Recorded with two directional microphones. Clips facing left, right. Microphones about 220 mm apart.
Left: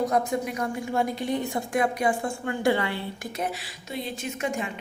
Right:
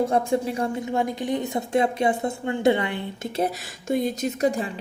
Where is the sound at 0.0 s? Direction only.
25° right (ahead or behind).